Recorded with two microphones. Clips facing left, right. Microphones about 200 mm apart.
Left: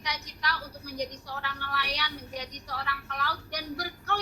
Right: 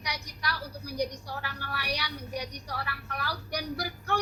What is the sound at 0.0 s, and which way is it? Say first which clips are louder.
A woman's voice: left 1 dB; 10° right (ahead or behind).